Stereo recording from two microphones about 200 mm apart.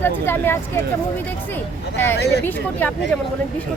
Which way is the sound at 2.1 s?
55° left (ahead or behind).